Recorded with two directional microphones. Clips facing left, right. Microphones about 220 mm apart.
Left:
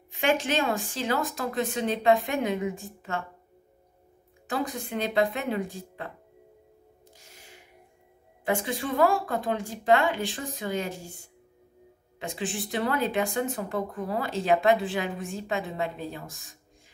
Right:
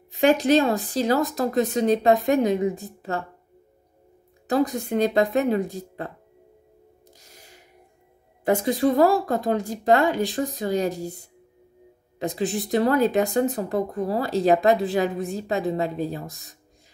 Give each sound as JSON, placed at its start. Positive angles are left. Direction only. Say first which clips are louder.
{"t": 0.1, "sound": "speech", "louder": "right 8 dB", "side_deg": -35}
{"t": 4.5, "sound": "speech", "louder": "right 8 dB", "side_deg": -40}
{"t": 7.2, "sound": "a sound", "louder": "even", "side_deg": -40}
{"t": 8.5, "sound": "speech", "louder": "right 8 dB", "side_deg": -40}